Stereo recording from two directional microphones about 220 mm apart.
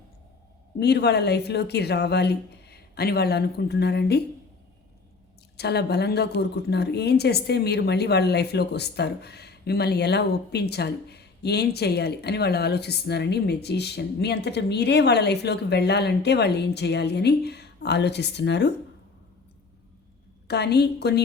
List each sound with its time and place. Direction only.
0.8 s speech: 50° left (ahead or behind)
5.5 s speech: 50° left (ahead or behind)
20.5 s speech: 50° left (ahead or behind)